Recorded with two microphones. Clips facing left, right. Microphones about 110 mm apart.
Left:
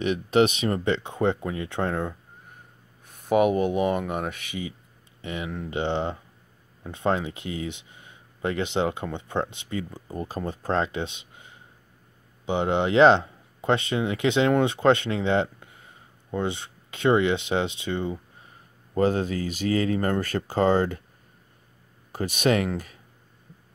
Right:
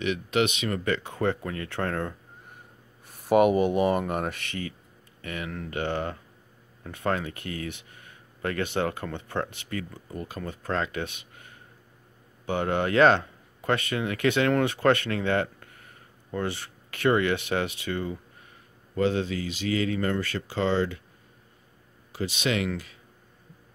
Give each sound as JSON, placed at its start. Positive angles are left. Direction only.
{"t": 0.0, "sound": "speech", "side_deg": 35}
{"t": 3.1, "sound": "speech", "side_deg": 0}
{"t": 5.2, "sound": "speech", "side_deg": 20}
{"t": 10.0, "sound": "speech", "side_deg": 35}
{"t": 18.9, "sound": "speech", "side_deg": 40}
{"t": 22.1, "sound": "speech", "side_deg": 50}